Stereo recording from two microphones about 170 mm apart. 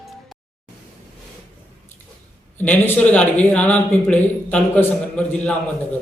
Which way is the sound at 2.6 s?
10° left (ahead or behind).